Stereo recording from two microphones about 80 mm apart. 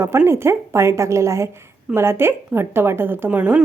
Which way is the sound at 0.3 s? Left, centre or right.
Right.